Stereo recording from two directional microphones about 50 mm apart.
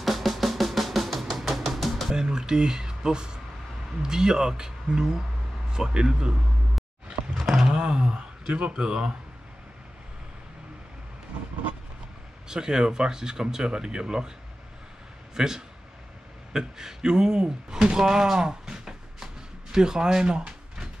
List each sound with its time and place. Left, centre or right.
0.0 s drum: centre
2.1 s speech: centre
7.3 s a sound: centre
7.6 s a sound: centre
12.4 s speech: centre
15.3 s speech: centre